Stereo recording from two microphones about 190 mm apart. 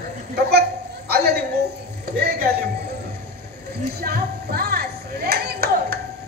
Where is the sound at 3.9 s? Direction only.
55° right (ahead or behind).